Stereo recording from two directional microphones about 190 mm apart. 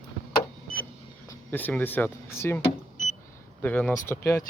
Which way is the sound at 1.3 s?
10° left (ahead or behind).